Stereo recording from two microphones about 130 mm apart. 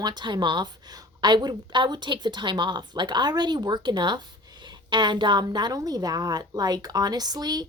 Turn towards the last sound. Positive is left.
turn(degrees=-30)  # may be behind; listen again after turning